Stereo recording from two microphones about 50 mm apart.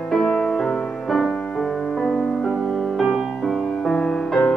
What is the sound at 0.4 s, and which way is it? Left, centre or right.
Music, centre.